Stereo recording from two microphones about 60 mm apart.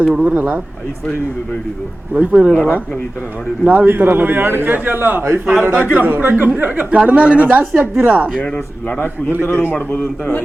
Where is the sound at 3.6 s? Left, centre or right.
Right.